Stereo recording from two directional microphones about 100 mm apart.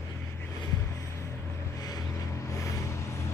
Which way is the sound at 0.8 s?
30° left (ahead or behind).